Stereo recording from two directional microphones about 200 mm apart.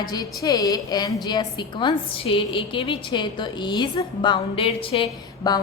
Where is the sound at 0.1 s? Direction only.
20° left (ahead or behind).